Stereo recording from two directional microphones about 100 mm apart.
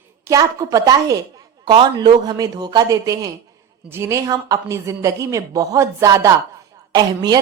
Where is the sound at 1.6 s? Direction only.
50° right (ahead or behind); by 6.3 s 30° right (ahead or behind).